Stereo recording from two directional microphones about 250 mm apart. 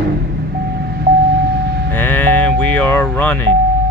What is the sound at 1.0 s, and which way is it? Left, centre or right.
Vehicle, right.